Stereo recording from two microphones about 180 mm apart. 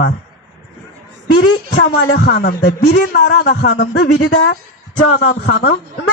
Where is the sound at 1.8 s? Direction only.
90° left; by 3.7 s 70° left (ahead or behind).